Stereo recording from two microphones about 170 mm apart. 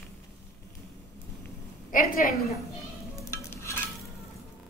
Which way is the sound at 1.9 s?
55° left (ahead or behind).